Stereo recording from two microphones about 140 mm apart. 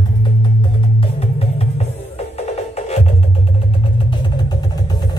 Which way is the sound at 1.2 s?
45° left (ahead or behind).